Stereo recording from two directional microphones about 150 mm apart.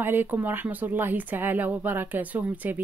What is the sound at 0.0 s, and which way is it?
Speech, 15° right (ahead or behind).